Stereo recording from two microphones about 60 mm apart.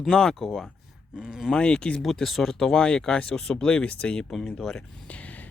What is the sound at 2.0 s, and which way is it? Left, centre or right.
Speech, centre.